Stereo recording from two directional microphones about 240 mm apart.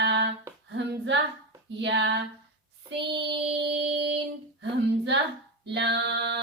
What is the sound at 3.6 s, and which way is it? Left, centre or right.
Female singing, right.